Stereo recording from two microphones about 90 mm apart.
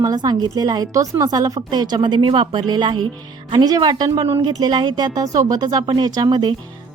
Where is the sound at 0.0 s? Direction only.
45° right (ahead or behind); by 2.6 s 85° right.